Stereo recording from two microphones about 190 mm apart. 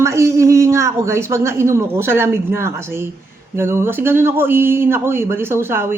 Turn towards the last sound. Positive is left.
turn(degrees=-10)  # may be behind; listen again after turning